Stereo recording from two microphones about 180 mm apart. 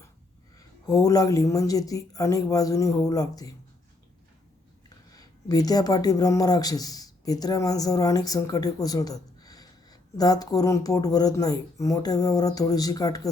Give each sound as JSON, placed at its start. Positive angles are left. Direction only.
{"t": 0.9, "sound": "speech", "side_deg": 20}
{"t": 5.1, "sound": "speech", "side_deg": 20}